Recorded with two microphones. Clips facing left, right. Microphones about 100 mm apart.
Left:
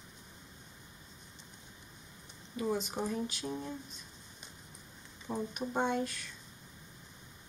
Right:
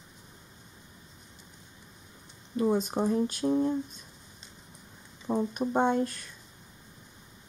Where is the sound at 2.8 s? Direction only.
45° right (ahead or behind).